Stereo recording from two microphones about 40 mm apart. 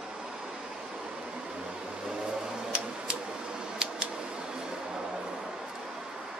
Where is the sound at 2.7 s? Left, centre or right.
Right.